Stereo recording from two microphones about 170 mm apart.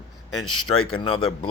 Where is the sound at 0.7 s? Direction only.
30° left (ahead or behind).